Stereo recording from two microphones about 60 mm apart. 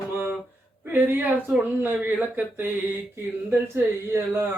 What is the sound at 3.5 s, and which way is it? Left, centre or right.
Speech, right.